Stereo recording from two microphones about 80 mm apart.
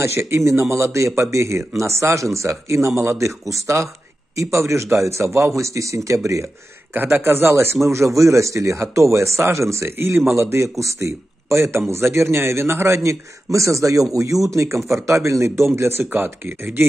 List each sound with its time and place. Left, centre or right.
0.0 s a man's voice: right
6.9 s a man's voice: right